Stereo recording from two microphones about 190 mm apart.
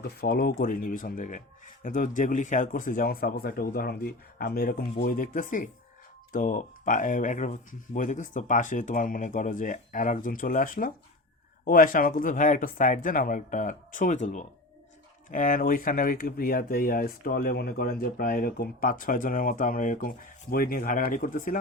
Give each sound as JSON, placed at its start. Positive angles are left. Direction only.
{"t": 0.0, "sound": "speech", "side_deg": 55}